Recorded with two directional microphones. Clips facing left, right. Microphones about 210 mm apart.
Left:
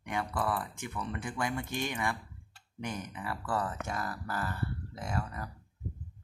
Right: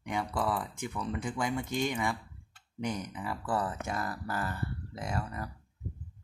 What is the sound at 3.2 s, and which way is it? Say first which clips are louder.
Speech: right 1 dB; 15° right (ahead or behind).